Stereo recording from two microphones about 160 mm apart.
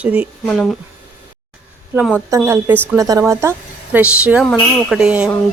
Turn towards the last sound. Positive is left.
turn(degrees=-5)  # may be behind; listen again after turning